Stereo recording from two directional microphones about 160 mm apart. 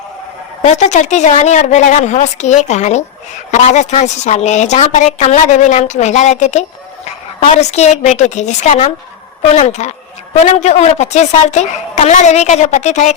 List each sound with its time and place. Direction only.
0.7 s a woman's voice: 45° left (ahead or behind)